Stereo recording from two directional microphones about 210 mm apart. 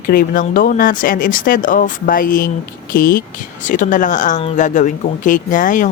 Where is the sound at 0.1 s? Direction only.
40° left (ahead or behind).